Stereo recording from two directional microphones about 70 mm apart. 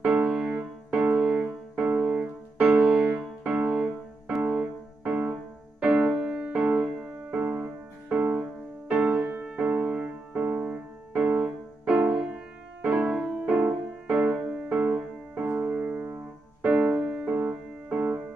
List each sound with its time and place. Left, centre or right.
0.0 s music: right
1.1 s music: centre
3.7 s music: centre
13.4 s music: right
15.4 s keyboard: right
16.6 s music: centre